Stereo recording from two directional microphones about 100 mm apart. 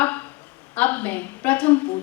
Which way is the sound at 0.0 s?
20° left (ahead or behind).